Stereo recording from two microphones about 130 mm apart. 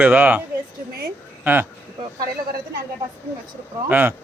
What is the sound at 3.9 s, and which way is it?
Speech, 15° right (ahead or behind).